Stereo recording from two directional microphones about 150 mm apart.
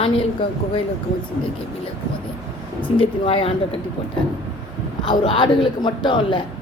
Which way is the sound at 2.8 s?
35° left (ahead or behind).